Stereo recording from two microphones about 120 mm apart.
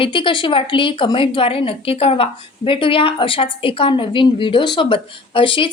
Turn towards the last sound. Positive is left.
turn(degrees=45)  # may be behind; listen again after turning